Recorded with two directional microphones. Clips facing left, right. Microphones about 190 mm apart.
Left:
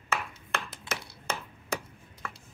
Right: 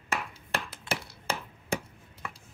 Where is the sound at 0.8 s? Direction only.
30° right (ahead or behind).